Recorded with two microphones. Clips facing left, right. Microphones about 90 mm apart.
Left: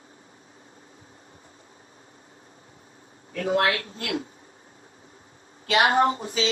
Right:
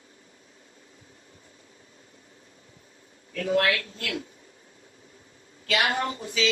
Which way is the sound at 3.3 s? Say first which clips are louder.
Left 1 dB; 35° left (ahead or behind).